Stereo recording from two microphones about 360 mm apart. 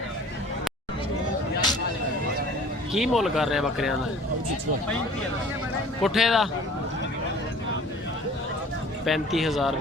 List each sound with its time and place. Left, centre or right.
2.9 s speech: centre
6.0 s speech: centre
9.0 s speech: centre